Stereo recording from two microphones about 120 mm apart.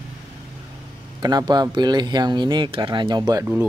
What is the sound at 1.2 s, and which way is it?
Speech, 35° right (ahead or behind).